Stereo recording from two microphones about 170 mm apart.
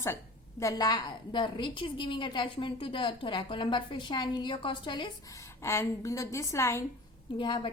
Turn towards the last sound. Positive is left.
turn(degrees=25)  # may be behind; listen again after turning